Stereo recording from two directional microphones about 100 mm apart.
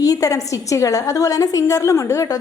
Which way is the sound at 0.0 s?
35° left (ahead or behind).